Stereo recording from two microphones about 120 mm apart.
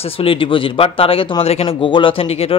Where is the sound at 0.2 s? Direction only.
50° left (ahead or behind).